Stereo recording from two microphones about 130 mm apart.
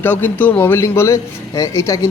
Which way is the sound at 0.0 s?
15° left (ahead or behind).